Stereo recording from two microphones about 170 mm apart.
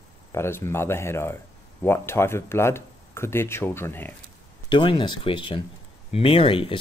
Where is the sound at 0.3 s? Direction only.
15° left (ahead or behind).